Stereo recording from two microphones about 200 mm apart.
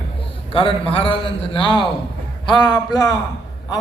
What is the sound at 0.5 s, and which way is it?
A man's voice, 25° left (ahead or behind).